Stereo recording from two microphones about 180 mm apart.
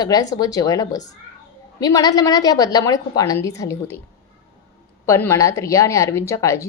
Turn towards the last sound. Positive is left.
turn(degrees=15)  # may be behind; listen again after turning